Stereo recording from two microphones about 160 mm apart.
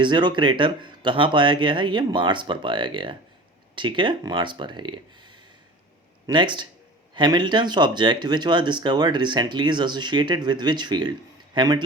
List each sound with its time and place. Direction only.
0.0 s speech: 30° right (ahead or behind)